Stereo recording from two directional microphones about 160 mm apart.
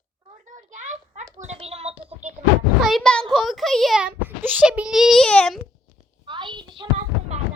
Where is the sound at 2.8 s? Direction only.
Centre (ahead or behind).